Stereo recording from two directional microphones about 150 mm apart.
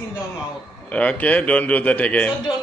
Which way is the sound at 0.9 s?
10° left (ahead or behind).